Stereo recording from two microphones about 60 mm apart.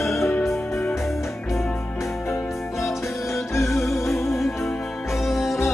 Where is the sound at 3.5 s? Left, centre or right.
Left.